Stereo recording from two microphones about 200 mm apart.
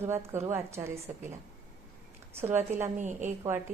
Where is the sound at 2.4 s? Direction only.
10° right (ahead or behind).